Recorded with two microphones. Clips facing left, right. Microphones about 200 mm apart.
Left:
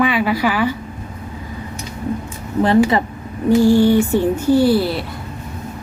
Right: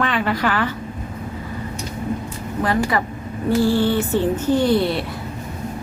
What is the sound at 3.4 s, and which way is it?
Speech, 15° left (ahead or behind).